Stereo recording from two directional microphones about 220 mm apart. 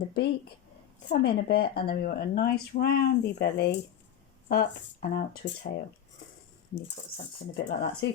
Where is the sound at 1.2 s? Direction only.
45° left (ahead or behind).